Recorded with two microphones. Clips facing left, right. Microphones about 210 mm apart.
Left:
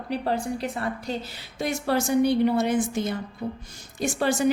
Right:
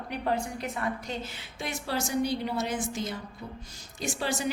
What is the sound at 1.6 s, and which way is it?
A woman's voice, 50° left (ahead or behind).